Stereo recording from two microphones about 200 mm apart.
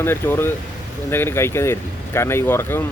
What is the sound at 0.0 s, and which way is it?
Speech, 10° left (ahead or behind).